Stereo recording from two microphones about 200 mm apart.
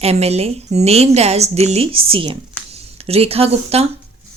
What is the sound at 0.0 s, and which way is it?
A woman's voice, 30° right (ahead or behind).